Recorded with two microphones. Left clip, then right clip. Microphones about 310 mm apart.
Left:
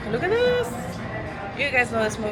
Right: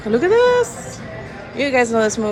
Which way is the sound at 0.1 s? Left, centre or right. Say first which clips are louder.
Right 8 dB; right.